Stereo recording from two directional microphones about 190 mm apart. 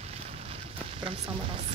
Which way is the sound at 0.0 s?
30° right (ahead or behind).